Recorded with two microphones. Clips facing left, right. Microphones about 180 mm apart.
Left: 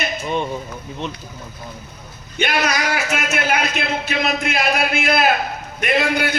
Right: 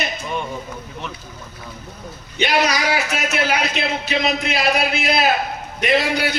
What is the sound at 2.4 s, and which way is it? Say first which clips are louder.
A man's voice: right 2 dB; 50° left (ahead or behind).